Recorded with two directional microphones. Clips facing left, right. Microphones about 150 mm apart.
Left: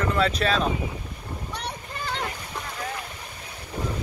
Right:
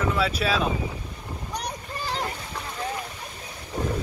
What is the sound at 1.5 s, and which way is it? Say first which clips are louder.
Boat: right 4 dB; 40° right (ahead or behind).